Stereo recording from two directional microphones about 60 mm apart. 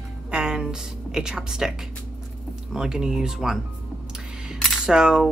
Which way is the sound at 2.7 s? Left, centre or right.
Centre.